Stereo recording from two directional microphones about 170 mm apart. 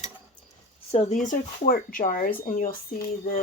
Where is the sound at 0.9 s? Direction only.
45° left (ahead or behind).